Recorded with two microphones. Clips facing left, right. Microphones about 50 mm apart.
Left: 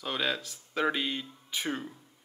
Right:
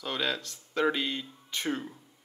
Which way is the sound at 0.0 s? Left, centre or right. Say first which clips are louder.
Even; centre.